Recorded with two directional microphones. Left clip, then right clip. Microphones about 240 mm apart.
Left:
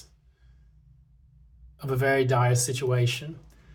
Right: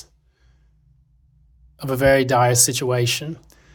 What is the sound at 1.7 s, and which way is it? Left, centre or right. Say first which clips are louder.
Speech: right 8 dB; right.